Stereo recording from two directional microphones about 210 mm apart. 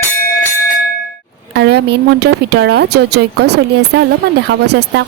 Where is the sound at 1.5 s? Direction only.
50° right (ahead or behind).